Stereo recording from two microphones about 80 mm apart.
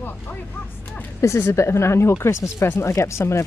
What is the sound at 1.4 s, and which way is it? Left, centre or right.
Speech, left.